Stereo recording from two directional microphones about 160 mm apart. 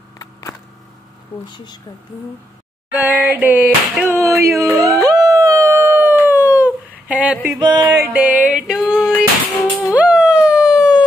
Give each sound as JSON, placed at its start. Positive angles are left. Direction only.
{"t": 0.2, "sound": "a sound", "side_deg": 20}
{"t": 1.5, "sound": "a woman's voice", "side_deg": 25}
{"t": 2.9, "sound": "slap", "side_deg": -10}
{"t": 4.7, "sound": "howl", "side_deg": -20}
{"t": 7.5, "sound": "music", "side_deg": -25}
{"t": 8.1, "sound": "music", "side_deg": -10}
{"t": 9.9, "sound": "dog", "side_deg": -5}